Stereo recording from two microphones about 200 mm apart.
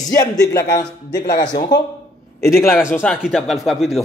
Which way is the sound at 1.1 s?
50° left (ahead or behind).